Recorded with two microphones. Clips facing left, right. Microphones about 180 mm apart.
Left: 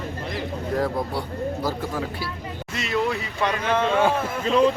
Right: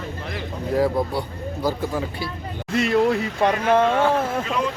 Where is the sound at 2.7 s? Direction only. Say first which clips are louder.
Right 6 dB; 50° right (ahead or behind).